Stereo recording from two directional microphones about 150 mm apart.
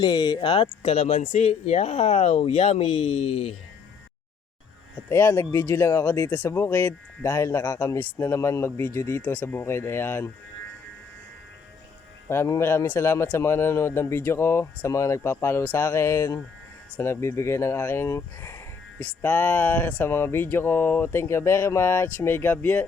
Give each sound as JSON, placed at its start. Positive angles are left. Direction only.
{"t": 0.0, "sound": "speech", "side_deg": 30}
{"t": 4.9, "sound": "speech", "side_deg": 15}
{"t": 12.3, "sound": "speech", "side_deg": 15}